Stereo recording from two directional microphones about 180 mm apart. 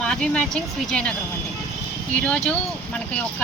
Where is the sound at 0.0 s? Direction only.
5° left (ahead or behind).